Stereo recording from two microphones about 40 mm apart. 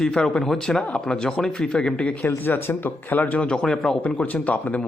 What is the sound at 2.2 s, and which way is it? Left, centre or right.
Speech, left.